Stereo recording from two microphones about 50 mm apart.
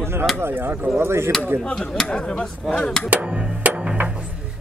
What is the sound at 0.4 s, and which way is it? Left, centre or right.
Speech, right.